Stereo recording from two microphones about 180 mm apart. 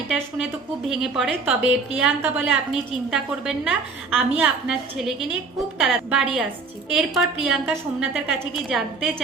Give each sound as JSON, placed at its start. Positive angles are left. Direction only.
{"t": 0.9, "sound": "a woman's voice", "side_deg": 0}